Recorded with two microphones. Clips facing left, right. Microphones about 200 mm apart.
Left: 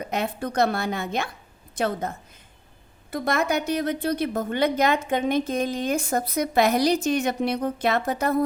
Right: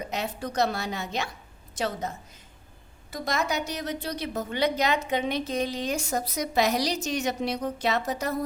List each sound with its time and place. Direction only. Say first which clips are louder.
0.0 s a woman's voice: left 4 dB; 55° left (ahead or behind)